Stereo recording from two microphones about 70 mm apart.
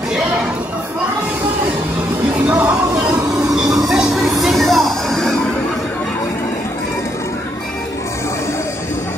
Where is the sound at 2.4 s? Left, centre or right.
Right.